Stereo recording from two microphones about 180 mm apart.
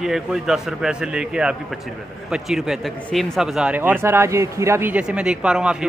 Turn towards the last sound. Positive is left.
turn(degrees=-5)  # may be behind; listen again after turning